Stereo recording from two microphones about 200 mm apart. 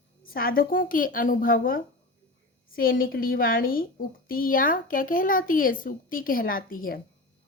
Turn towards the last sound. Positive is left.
turn(degrees=45)  # may be behind; listen again after turning